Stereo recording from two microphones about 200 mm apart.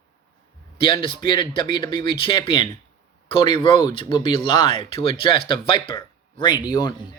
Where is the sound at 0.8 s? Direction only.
25° left (ahead or behind).